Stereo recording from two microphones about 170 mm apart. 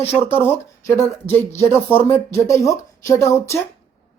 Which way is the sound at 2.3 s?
15° left (ahead or behind).